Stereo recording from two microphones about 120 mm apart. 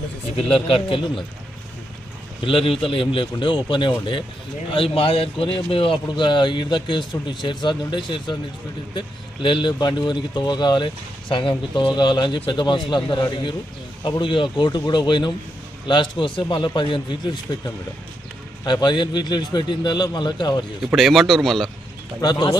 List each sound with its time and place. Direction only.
0.5 s a man's voice: 50° left (ahead or behind)
2.4 s a man's voice: 50° left (ahead or behind)
18.6 s speech: 40° left (ahead or behind)
20.8 s speech: centre (ahead or behind)
22.2 s speech: 35° left (ahead or behind)